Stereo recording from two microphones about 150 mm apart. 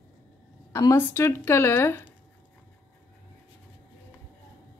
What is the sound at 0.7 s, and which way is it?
Speech, 20° left (ahead or behind).